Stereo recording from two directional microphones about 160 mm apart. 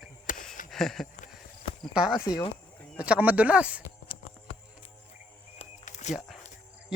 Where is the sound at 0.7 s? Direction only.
Centre (ahead or behind).